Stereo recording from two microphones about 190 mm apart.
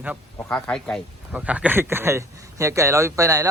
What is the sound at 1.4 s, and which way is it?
Speech, 5° right (ahead or behind).